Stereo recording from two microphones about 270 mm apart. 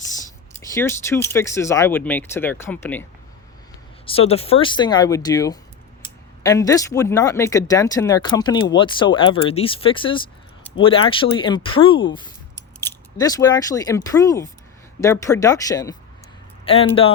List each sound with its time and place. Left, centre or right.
0.7 s speech: centre
4.0 s speech: left